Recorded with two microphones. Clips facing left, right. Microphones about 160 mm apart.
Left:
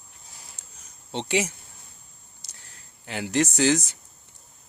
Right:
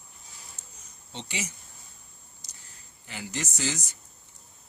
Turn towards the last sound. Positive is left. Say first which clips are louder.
# left 11 dB
turn(degrees=70)  # may be behind; listen again after turning